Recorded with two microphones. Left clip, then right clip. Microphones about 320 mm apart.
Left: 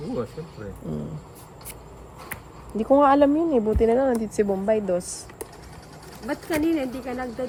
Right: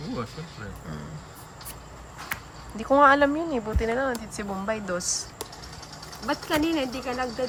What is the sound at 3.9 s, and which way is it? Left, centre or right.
Speech, centre.